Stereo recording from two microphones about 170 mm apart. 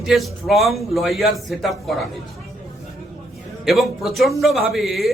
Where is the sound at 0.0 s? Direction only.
Centre (ahead or behind).